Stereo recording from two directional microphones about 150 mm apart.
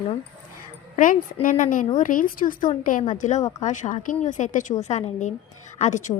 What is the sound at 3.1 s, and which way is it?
Speech, 55° left (ahead or behind).